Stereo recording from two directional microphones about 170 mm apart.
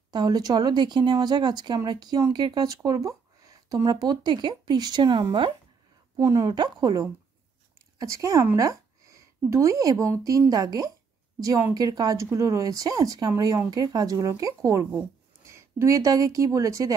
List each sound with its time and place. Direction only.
0.1 s a woman's voice: 25° right (ahead or behind)